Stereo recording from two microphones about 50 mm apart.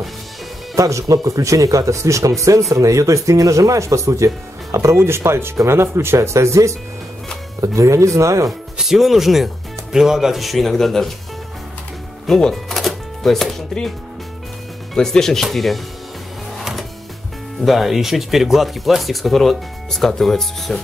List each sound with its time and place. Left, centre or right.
0.7 s speech: right
4.7 s speech: right
8.7 s speech: centre
12.4 s music: centre
15.0 s speech: centre
16.5 s printer: centre
17.6 s speech: centre